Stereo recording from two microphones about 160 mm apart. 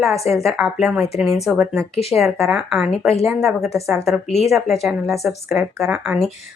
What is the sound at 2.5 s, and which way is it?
Speech, centre (ahead or behind).